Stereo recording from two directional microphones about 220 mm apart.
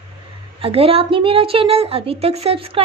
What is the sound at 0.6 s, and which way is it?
A woman's voice, 25° right (ahead or behind).